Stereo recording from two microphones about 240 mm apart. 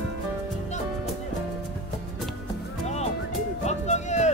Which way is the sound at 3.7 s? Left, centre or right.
Left.